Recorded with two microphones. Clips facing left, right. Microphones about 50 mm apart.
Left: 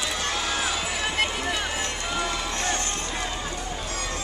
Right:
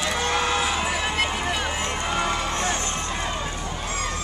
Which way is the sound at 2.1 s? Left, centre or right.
Right.